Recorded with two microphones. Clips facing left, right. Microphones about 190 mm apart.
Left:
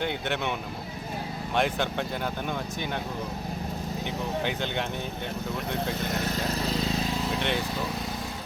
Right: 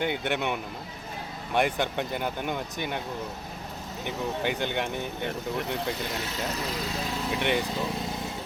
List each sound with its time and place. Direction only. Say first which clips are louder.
0.0 s speech: right 1 dB; 10° right (ahead or behind)
1.5 s speech: right 1 dB; 15° right (ahead or behind)
4.4 s speech: right 1 dB; 10° right (ahead or behind)
7.3 s speech: right 5 dB; 10° right (ahead or behind)